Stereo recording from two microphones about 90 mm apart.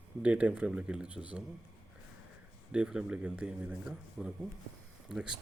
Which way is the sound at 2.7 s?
10° right (ahead or behind).